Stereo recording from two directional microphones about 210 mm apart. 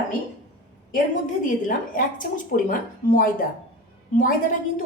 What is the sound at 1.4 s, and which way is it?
A woman's voice, 40° left (ahead or behind).